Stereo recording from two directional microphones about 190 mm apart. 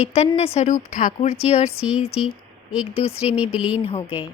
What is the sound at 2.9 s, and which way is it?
Speech, 30° left (ahead or behind).